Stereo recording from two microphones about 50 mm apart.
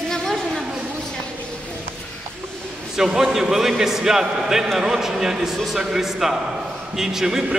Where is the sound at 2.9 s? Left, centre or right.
Centre.